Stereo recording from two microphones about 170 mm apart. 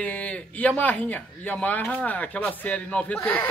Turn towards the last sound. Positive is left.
turn(degrees=10)  # may be behind; listen again after turning